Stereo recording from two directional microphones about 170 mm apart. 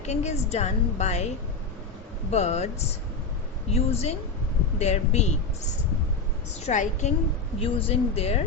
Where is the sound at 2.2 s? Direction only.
40° left (ahead or behind).